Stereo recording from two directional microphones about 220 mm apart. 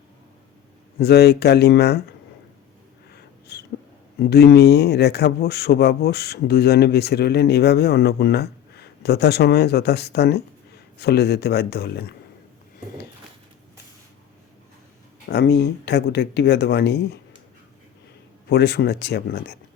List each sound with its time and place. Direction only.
0.9 s a man's voice: 45° left (ahead or behind)
3.1 s a sound: 50° left (ahead or behind)
4.2 s a man's voice: 45° left (ahead or behind)
15.3 s a man's voice: 50° left (ahead or behind)
18.4 s a man's voice: 45° left (ahead or behind)